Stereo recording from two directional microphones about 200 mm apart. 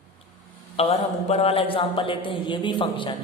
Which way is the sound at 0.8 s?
30° left (ahead or behind).